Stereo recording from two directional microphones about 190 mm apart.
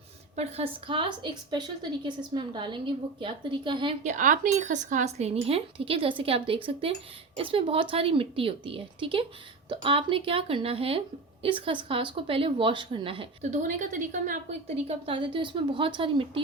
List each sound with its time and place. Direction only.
0.3 s a woman's voice: 30° right (ahead or behind)
4.0 s a woman's voice: 40° right (ahead or behind)
14.8 s a woman's voice: 30° right (ahead or behind)